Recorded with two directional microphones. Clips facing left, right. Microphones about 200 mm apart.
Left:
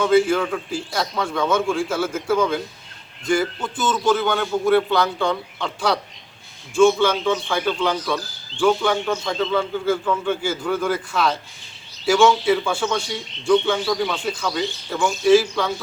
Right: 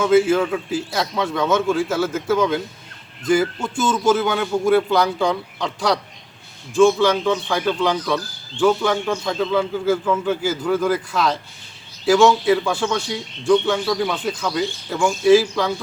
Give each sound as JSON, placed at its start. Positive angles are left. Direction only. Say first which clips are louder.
{"t": 0.0, "sound": "a man's voice", "louder": "right 2 dB", "side_deg": -5}